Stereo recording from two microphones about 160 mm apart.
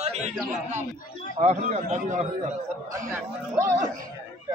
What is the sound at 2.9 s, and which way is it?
Speech, 15° right (ahead or behind).